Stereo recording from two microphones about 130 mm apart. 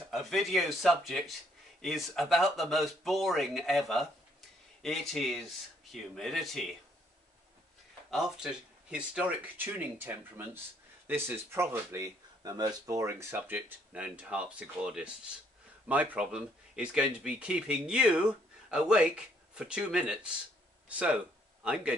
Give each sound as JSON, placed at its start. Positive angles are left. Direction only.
{"t": 0.1, "sound": "speech", "side_deg": 0}
{"t": 8.1, "sound": "speech", "side_deg": -5}